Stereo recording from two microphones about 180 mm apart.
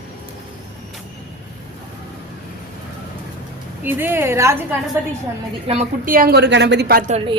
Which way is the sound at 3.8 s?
10° right (ahead or behind).